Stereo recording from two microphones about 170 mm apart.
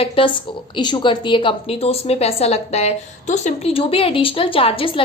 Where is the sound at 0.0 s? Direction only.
30° left (ahead or behind).